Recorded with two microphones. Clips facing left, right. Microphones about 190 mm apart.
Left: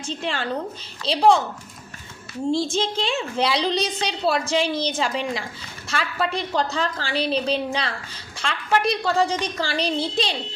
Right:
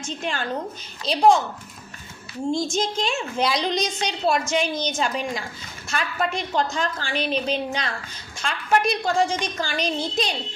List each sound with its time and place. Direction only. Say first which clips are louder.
0.0 s a woman's voice: left 1 dB; 30° left (ahead or behind)
2.5 s a woman's voice: left 1 dB; 30° left (ahead or behind)